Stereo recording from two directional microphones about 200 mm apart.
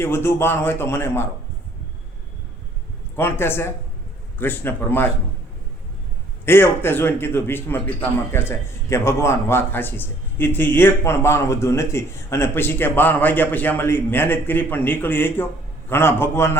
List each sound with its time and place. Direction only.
0.0 s a man's voice: 10° left (ahead or behind)
3.2 s a man's voice: 10° left (ahead or behind)
6.4 s a man's voice: 10° left (ahead or behind)